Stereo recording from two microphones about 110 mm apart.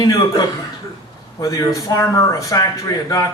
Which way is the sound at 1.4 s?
30° left (ahead or behind).